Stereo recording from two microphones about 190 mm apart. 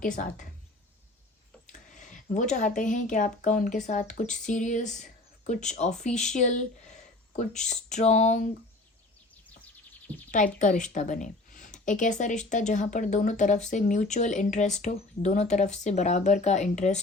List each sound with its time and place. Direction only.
0.0 s speech: 40° left (ahead or behind)
1.7 s a woman's voice: 40° left (ahead or behind)
10.3 s speech: 45° left (ahead or behind)